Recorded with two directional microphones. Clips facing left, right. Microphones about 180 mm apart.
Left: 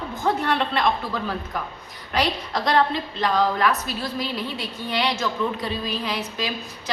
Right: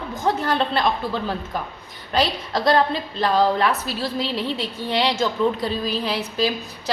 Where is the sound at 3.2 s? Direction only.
30° right (ahead or behind).